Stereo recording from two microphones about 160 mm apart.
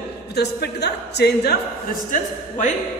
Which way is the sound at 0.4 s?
90° left.